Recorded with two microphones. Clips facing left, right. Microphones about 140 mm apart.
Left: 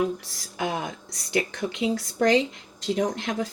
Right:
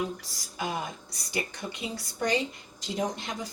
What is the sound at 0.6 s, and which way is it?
Speech, 90° left.